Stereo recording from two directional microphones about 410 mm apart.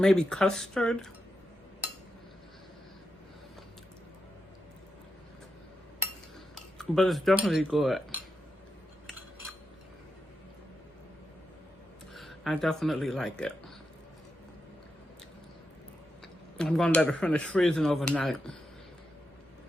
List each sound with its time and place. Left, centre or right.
0.0 s speech: centre
6.7 s speech: centre
12.1 s speech: centre
16.6 s speech: centre